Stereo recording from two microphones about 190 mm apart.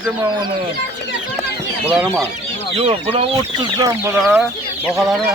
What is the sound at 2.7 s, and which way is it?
Speech, 30° right (ahead or behind).